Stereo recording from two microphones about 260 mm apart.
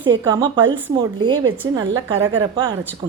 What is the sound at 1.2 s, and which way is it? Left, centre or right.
Speech, centre.